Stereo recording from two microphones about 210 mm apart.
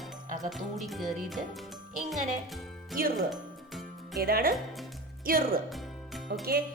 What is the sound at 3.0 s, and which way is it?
Speech, 45° right (ahead or behind).